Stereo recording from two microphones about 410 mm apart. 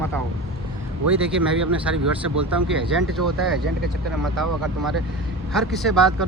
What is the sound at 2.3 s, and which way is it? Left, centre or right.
Speech, right.